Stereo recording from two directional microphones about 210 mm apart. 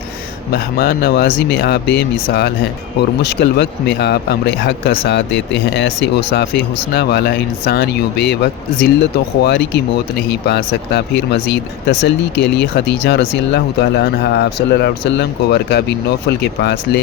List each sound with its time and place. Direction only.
0.5 s speech: 50° left (ahead or behind)
9.4 s speech: 55° left (ahead or behind)